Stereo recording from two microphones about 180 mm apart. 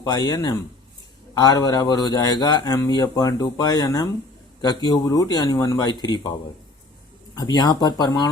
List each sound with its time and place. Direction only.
0.0 s speech: 20° left (ahead or behind)
7.3 s speech: 20° left (ahead or behind)